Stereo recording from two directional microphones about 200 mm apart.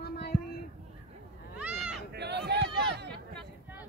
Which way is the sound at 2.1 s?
55° right (ahead or behind).